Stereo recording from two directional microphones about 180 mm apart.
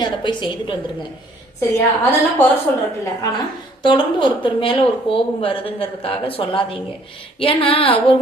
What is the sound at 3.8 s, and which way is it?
A woman's voice, 25° left (ahead or behind).